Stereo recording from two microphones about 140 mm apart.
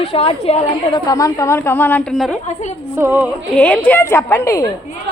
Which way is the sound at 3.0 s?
15° right (ahead or behind).